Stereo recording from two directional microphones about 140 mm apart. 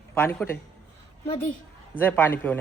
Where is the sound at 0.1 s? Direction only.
15° left (ahead or behind).